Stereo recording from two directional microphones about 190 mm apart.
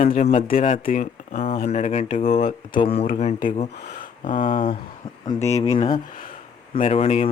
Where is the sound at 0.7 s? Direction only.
45° left (ahead or behind).